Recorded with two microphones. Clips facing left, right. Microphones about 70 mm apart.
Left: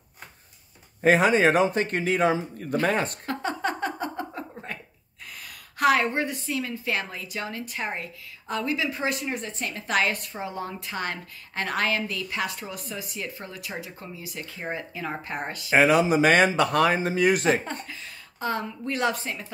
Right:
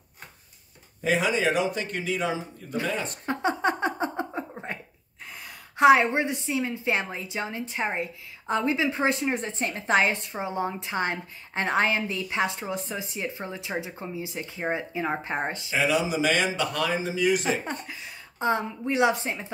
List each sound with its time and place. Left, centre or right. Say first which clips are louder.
1.0 s speech: left 5 dB; left
3.3 s a sound: right 3 dB; right
5.4 s a woman's voice: right 4 dB; right
15.7 s speech: left 6 dB; left
17.8 s a woman's voice: right 1 dB; centre